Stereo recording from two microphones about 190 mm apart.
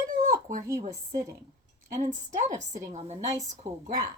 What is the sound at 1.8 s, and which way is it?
Speech, 40° right (ahead or behind).